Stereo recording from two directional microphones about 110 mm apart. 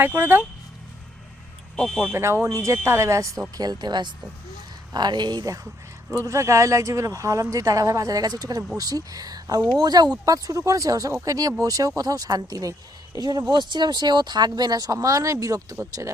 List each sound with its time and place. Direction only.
0.0 s speech: 20° right (ahead or behind)
1.7 s speech: 5° left (ahead or behind)
2.1 s speech: 25° right (ahead or behind)
3.6 s speech: 40° right (ahead or behind)
6.1 s speech: 30° right (ahead or behind)